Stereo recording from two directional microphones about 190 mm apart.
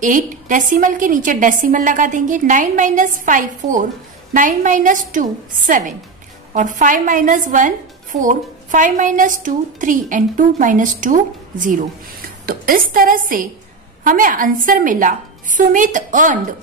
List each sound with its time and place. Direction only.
0.0 s a woman's voice: 45° right (ahead or behind)